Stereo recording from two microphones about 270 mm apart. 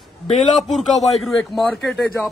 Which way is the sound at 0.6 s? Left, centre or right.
Centre.